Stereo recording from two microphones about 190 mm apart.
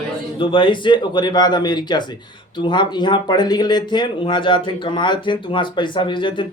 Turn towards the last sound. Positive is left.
turn(degrees=25)  # may be behind; listen again after turning